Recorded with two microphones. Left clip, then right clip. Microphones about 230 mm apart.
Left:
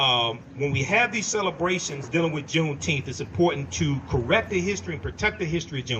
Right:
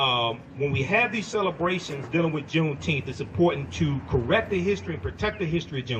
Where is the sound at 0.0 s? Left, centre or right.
Left.